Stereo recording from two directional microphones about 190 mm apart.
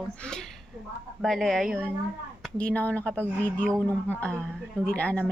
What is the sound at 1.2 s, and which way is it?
A woman's voice, centre (ahead or behind).